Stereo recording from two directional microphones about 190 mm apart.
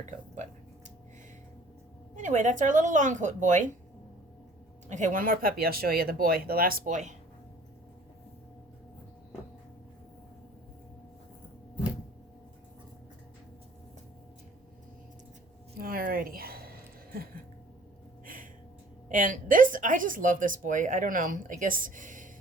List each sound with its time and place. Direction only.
2.1 s speech: 40° right (ahead or behind)
4.9 s speech: 40° right (ahead or behind)
15.8 s a sound: 50° right (ahead or behind)
19.0 s speech: 45° right (ahead or behind)